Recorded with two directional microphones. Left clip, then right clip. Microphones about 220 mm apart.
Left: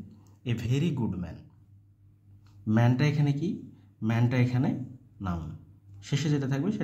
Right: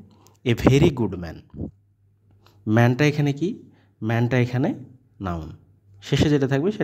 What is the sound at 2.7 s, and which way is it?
Speech, 45° right (ahead or behind).